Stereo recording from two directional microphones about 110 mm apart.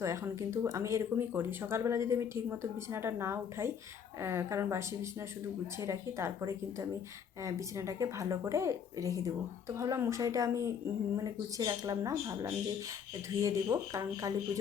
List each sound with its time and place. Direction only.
0.0 s speech: 30° right (ahead or behind)